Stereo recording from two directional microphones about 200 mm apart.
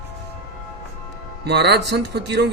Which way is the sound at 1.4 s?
55° right (ahead or behind).